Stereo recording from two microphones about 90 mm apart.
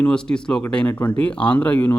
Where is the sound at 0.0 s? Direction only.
10° left (ahead or behind).